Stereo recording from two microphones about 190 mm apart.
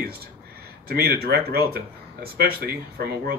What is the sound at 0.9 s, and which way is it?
Speech, 55° right (ahead or behind).